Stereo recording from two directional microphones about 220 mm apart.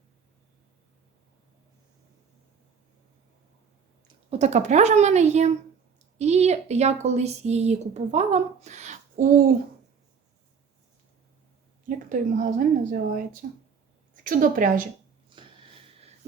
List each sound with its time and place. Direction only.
4.3 s speech: 30° right (ahead or behind)
11.9 s speech: 35° right (ahead or behind)
15.4 s a sound: 25° right (ahead or behind)